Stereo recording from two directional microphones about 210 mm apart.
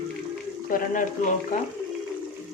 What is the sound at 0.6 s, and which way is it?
Speech, 40° left (ahead or behind).